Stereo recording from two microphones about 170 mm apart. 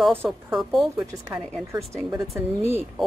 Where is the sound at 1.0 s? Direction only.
20° right (ahead or behind).